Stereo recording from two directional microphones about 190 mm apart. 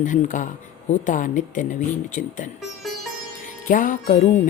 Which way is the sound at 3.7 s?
45° left (ahead or behind).